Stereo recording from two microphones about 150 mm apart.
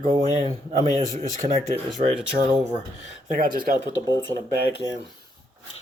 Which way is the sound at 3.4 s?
70° right (ahead or behind).